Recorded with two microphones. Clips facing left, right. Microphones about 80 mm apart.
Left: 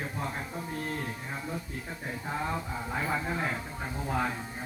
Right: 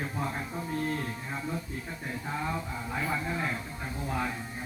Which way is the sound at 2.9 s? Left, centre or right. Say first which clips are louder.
Even; left.